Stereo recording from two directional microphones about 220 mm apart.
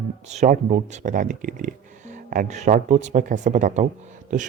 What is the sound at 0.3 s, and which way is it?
Speech, 30° right (ahead or behind).